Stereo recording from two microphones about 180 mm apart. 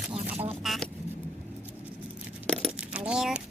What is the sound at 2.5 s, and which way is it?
Crumpling, centre (ahead or behind).